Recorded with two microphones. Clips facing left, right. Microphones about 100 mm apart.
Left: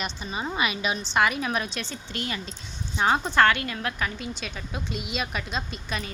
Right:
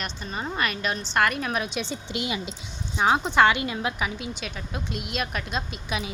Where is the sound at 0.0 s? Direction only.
5° left (ahead or behind).